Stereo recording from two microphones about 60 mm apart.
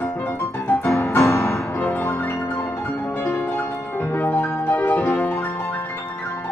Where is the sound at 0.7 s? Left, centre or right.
Left.